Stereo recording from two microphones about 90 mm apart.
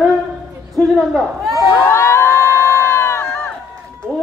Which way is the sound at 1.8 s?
30° left (ahead or behind).